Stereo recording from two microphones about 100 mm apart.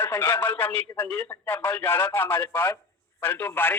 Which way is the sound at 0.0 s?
25° left (ahead or behind).